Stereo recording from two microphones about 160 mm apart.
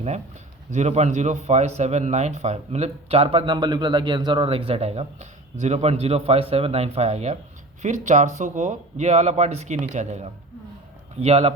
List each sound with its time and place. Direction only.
0.7 s speech: 45° right (ahead or behind)